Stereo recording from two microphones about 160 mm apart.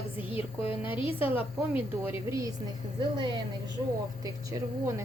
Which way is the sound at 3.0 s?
30° right (ahead or behind).